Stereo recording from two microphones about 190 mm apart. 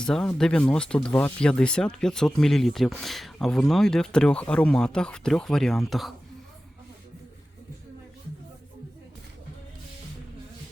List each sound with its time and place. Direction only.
0.0 s speech: 5° left (ahead or behind)